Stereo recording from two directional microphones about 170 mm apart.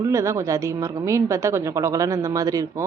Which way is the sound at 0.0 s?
15° right (ahead or behind).